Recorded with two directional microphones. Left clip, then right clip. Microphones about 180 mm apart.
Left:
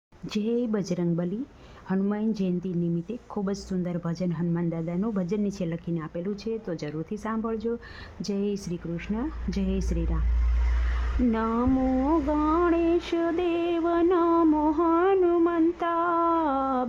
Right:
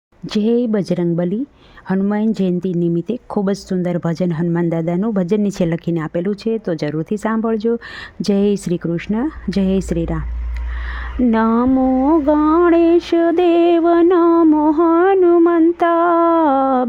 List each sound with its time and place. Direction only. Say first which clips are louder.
0.3 s a woman's voice: right 11 dB; 40° right (ahead or behind)
11.3 s speech: right 11 dB; 45° right (ahead or behind)